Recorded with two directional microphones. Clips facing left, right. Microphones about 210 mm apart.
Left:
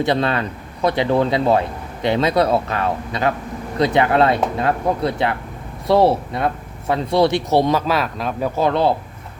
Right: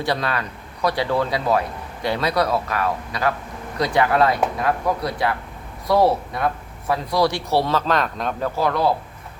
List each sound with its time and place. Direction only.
0.0 s speech: 25° left (ahead or behind)